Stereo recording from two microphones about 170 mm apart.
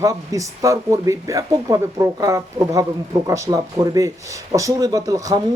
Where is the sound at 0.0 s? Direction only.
20° right (ahead or behind).